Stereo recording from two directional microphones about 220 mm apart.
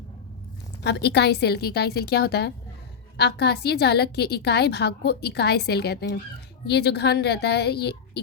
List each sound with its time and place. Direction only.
0.9 s a woman's voice: 50° left (ahead or behind)